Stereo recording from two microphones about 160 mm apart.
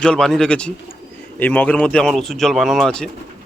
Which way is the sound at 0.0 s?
5° left (ahead or behind).